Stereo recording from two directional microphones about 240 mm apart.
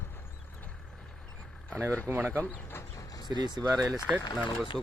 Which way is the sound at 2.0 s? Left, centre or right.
Centre.